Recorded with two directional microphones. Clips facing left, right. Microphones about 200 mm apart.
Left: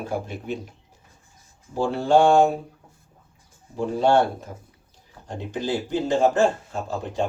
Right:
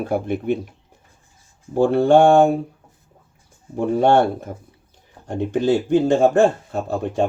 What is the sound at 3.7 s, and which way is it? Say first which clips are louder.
Speech: right 4 dB; 55° right (ahead or behind).